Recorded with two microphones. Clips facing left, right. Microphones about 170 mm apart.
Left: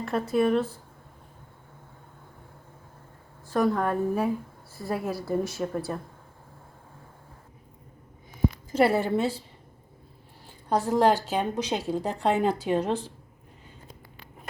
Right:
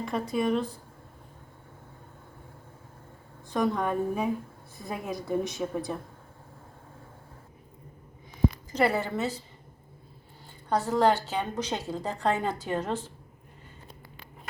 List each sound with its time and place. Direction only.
0.0 s a woman's voice: 5° left (ahead or behind)
3.5 s a woman's voice: 5° left (ahead or behind)
8.8 s a woman's voice: 25° left (ahead or behind)
10.7 s a woman's voice: 10° left (ahead or behind)